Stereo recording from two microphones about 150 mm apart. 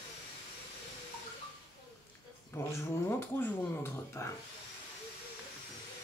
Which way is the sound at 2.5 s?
15° left (ahead or behind).